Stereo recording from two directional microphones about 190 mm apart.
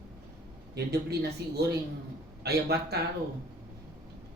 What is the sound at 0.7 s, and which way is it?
Speech, 60° right (ahead or behind).